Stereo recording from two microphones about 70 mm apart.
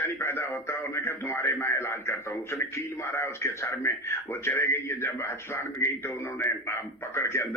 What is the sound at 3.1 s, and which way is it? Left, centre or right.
Speech, left.